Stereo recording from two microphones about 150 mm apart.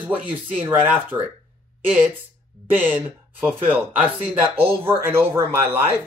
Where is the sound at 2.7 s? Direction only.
15° right (ahead or behind).